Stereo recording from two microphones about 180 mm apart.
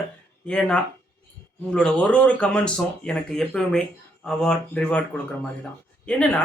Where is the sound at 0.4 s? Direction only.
5° left (ahead or behind).